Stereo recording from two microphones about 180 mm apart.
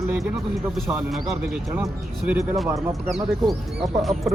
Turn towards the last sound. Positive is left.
turn(degrees=0)  # may be behind; listen again after turning